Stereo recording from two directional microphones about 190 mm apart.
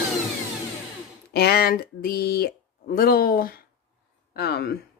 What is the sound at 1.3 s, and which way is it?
A woman's voice, 55° left (ahead or behind).